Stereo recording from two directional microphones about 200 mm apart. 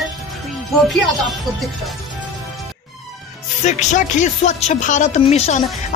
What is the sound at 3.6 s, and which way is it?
Speech, 35° left (ahead or behind).